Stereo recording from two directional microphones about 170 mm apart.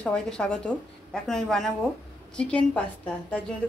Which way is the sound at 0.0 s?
5° left (ahead or behind).